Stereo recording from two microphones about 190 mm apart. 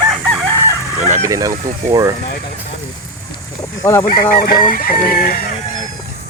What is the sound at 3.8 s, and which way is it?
Speech, 15° left (ahead or behind).